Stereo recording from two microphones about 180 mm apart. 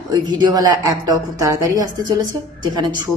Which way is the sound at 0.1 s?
20° right (ahead or behind).